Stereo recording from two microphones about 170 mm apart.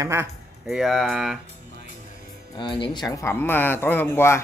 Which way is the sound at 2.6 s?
30° left (ahead or behind).